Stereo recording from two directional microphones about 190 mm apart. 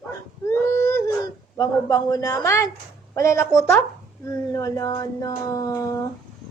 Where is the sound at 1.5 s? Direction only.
15° left (ahead or behind).